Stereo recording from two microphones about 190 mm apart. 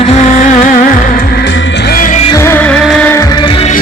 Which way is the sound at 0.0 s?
35° left (ahead or behind).